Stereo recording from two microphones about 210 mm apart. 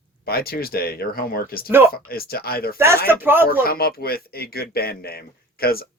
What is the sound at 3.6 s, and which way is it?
Speech, 45° left (ahead or behind).